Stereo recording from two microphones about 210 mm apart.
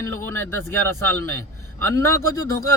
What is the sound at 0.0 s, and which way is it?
Speech, 10° left (ahead or behind).